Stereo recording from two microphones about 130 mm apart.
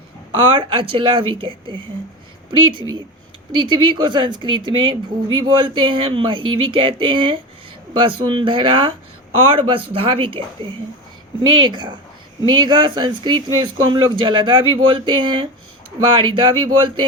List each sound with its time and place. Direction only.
0.3 s a woman's voice: 40° right (ahead or behind)